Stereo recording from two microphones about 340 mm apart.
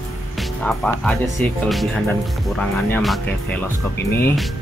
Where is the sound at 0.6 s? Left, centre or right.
Centre.